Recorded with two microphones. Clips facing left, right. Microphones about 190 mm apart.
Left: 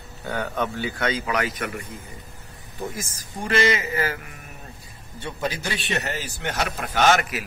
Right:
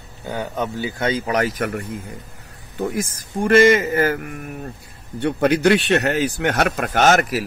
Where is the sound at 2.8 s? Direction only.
60° right (ahead or behind).